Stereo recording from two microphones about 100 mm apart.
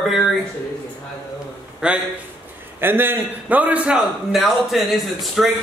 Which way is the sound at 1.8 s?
10° right (ahead or behind).